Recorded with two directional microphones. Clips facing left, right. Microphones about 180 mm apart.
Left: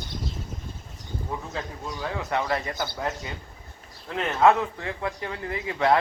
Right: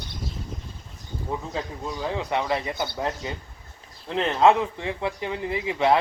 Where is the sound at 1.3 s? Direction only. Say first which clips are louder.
Right 4 dB; 20° right (ahead or behind).